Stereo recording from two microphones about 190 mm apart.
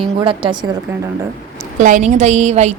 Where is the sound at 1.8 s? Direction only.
40° right (ahead or behind).